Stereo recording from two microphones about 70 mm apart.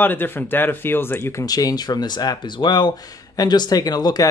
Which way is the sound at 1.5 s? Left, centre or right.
Left.